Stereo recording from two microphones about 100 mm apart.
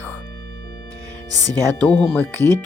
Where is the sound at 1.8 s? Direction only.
15° left (ahead or behind).